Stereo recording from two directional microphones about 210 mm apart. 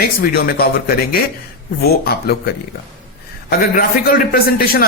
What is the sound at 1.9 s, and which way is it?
Speech, 50° left (ahead or behind).